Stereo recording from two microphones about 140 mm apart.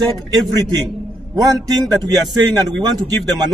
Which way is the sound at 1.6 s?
30° right (ahead or behind).